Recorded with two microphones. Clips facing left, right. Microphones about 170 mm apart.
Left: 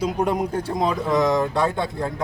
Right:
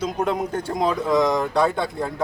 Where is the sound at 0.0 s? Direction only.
10° left (ahead or behind).